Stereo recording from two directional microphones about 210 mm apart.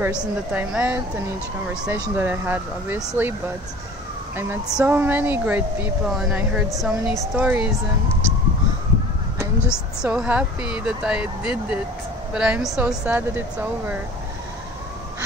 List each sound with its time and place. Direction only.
0.0 s speech: 5° right (ahead or behind)
10.0 s speech: 5° right (ahead or behind)